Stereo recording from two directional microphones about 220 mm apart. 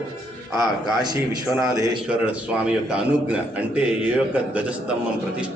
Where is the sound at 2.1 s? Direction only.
5° right (ahead or behind).